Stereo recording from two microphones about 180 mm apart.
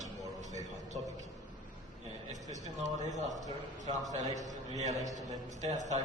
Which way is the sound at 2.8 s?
40° right (ahead or behind).